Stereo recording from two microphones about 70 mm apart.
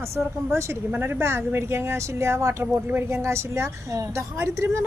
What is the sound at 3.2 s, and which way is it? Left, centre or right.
A woman's voice, right.